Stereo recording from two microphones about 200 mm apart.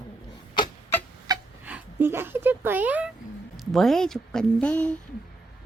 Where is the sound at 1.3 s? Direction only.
20° right (ahead or behind).